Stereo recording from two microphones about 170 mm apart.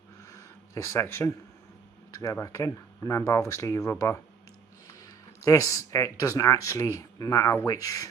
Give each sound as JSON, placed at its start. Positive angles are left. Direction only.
{"t": 0.3, "sound": "a sound", "side_deg": 15}
{"t": 2.1, "sound": "speech", "side_deg": 20}
{"t": 5.4, "sound": "speech", "side_deg": 20}